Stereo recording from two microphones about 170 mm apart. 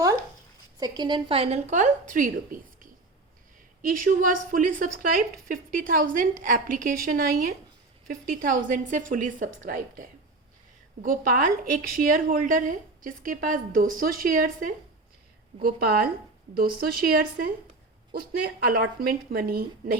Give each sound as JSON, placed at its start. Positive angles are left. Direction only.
{"t": 0.8, "sound": "a woman's voice", "side_deg": -25}